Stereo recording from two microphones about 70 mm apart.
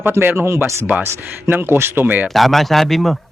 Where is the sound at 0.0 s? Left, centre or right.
Right.